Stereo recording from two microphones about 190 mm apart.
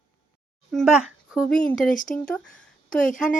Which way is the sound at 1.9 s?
45° left (ahead or behind).